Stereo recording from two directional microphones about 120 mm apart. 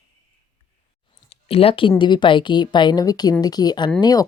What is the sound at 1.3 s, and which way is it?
A woman's voice, 55° left (ahead or behind).